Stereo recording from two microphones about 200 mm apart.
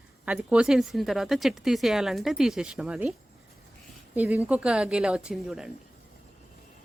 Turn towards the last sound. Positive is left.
turn(degrees=0)  # may be behind; listen again after turning